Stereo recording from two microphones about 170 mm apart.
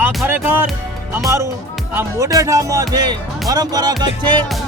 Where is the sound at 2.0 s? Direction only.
20° right (ahead or behind).